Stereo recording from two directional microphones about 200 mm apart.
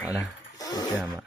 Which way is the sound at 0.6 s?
20° left (ahead or behind).